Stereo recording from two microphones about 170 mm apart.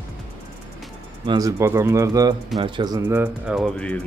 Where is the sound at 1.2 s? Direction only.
20° right (ahead or behind).